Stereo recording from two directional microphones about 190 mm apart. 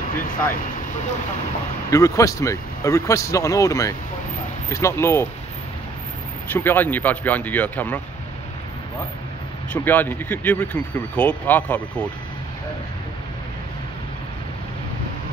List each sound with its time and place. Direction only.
1.9 s speech: 15° left (ahead or behind)
6.5 s speech: 10° left (ahead or behind)
9.7 s speech: 10° left (ahead or behind)